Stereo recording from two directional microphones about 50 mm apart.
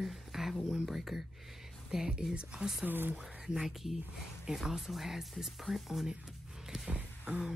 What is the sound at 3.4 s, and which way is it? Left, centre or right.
Speech, centre.